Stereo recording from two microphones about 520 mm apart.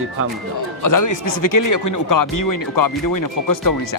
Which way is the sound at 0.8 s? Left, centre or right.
Left.